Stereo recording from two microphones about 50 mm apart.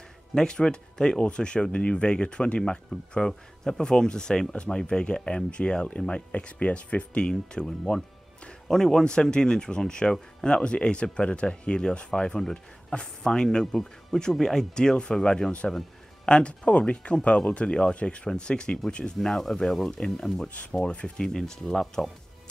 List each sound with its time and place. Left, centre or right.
0.3 s speech: centre
19.1 s speech: centre